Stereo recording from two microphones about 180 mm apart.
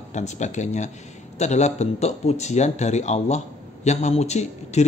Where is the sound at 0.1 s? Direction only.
40° left (ahead or behind).